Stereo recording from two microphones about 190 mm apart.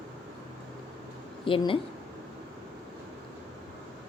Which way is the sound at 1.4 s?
25° left (ahead or behind).